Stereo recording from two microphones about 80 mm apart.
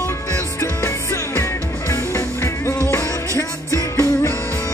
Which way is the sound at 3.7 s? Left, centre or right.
Left.